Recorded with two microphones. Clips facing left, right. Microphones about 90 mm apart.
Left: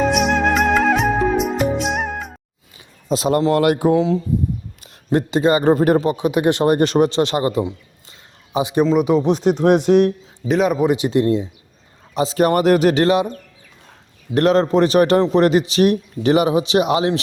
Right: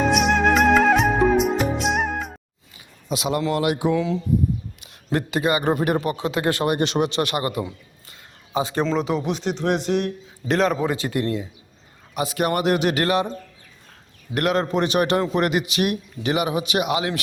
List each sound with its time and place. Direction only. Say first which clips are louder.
0.0 s music: left 2 dB; centre (ahead or behind)
2.7 s speech: left 6 dB; 35° left (ahead or behind)
3.9 s a man's voice: left 4 dB; 30° left (ahead or behind)
6.1 s speech: left 6 dB; 20° left (ahead or behind)
6.7 s a man's voice: left 6 dB; 40° left (ahead or behind)
7.2 s speech: left 6 dB; 25° left (ahead or behind)
9.2 s speech: left 8 dB; 45° left (ahead or behind)
10.5 s a man's voice: left 4 dB; 10° left (ahead or behind); by 13.0 s 40° left (ahead or behind)
13.0 s speech: left 5 dB; 25° left (ahead or behind)
14.3 s a man's voice: left 7 dB; 30° left (ahead or behind)